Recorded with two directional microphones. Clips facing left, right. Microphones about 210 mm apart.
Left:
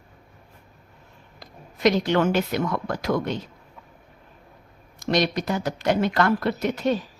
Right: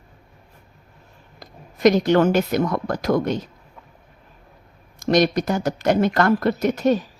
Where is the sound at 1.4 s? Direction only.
45° right (ahead or behind).